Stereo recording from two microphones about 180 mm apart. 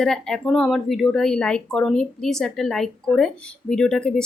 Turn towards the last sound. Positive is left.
turn(degrees=5)  # may be behind; listen again after turning